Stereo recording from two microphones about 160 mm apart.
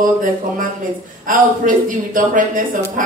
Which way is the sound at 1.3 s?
55° right (ahead or behind).